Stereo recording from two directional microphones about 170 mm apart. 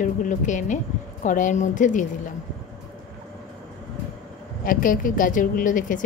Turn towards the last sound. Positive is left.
turn(degrees=50)  # may be behind; listen again after turning